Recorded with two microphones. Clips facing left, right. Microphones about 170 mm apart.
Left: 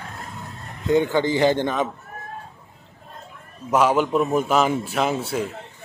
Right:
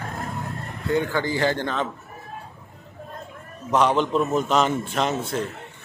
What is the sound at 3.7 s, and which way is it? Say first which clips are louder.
A man's voice: left 1 dB; 10° left (ahead or behind).